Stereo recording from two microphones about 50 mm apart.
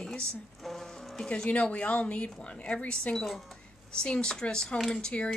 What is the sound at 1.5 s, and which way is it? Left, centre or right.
A woman's voice, left.